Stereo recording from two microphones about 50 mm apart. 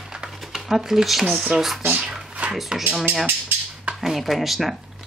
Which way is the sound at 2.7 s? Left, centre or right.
Centre.